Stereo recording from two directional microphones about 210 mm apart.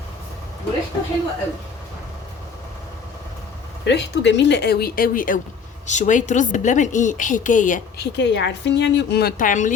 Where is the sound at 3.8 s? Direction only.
55° left (ahead or behind); by 8.1 s 40° left (ahead or behind).